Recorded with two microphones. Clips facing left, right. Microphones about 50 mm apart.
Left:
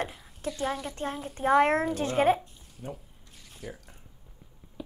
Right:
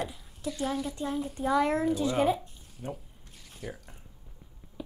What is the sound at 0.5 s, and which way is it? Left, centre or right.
Speech, centre.